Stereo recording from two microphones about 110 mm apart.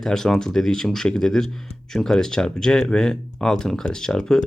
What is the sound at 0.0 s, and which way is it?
Speech, 5° left (ahead or behind).